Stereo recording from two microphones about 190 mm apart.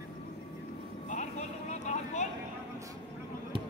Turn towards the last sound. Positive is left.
turn(degrees=35)  # may be behind; listen again after turning